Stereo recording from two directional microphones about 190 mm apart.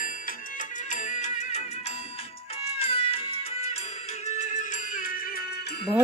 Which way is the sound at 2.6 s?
30° left (ahead or behind).